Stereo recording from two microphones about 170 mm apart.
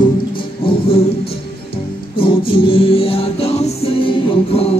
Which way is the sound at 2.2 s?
30° left (ahead or behind).